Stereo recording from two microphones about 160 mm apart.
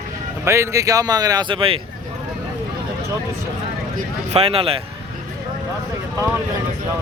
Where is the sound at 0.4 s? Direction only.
15° right (ahead or behind); by 1.8 s 35° right (ahead or behind).